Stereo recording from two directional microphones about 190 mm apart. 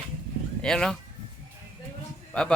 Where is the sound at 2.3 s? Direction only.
5° left (ahead or behind).